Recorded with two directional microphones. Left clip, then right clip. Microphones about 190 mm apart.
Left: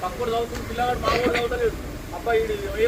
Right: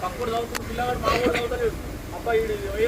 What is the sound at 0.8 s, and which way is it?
Speech, centre (ahead or behind).